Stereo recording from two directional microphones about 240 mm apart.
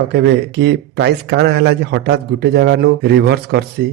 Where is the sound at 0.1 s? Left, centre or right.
Right.